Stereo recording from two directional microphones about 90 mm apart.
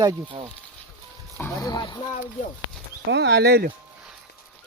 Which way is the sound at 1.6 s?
55° left (ahead or behind).